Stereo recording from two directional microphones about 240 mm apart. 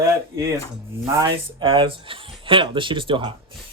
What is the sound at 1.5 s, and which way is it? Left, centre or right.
Speech, right.